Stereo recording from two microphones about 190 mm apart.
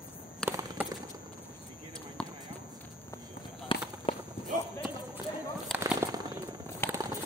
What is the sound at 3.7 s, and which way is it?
Run, 25° left (ahead or behind).